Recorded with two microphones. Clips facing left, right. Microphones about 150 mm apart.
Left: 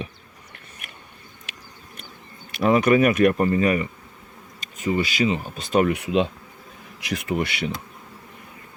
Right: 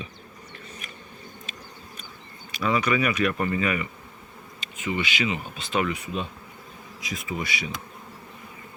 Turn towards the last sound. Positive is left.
turn(degrees=60)  # may be behind; listen again after turning